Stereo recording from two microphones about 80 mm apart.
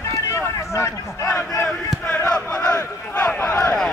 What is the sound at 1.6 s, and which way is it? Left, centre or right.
Battle cry, left.